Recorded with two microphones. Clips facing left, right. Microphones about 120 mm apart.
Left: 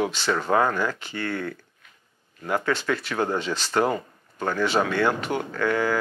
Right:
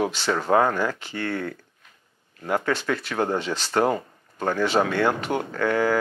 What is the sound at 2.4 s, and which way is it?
Speech, 30° right (ahead or behind).